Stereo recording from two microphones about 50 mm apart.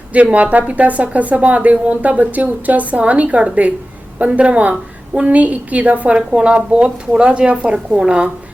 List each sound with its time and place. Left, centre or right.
0.1 s speech: right
6.1 s speech: centre